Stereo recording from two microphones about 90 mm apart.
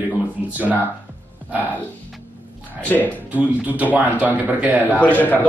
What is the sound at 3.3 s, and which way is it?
A man's voice, 15° right (ahead or behind).